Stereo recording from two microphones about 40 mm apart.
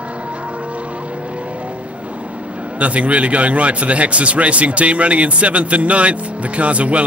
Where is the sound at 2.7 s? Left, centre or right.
Right.